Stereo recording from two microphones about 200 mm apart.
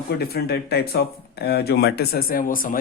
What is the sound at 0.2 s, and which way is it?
Speech, 50° left (ahead or behind).